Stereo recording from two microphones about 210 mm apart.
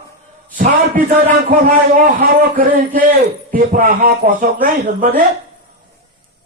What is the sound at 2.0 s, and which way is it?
A man's voice, 40° right (ahead or behind).